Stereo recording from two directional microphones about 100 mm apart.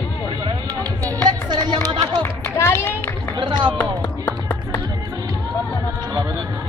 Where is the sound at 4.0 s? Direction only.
20° left (ahead or behind).